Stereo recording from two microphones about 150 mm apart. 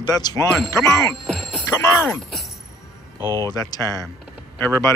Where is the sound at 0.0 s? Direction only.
25° left (ahead or behind).